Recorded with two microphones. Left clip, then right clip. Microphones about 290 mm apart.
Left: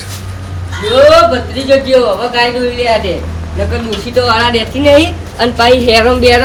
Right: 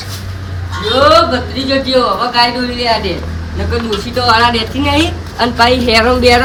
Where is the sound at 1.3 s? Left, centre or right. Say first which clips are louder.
Left 4 dB; centre.